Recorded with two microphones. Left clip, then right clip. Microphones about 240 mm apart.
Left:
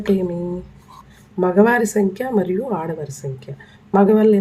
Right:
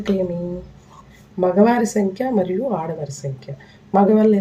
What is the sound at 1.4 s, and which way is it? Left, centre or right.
A woman's voice, left.